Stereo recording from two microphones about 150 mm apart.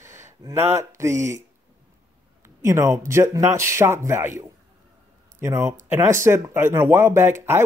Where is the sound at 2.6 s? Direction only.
20° right (ahead or behind).